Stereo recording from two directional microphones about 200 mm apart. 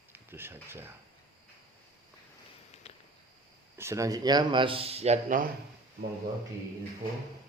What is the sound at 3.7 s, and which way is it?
Speech, 15° right (ahead or behind).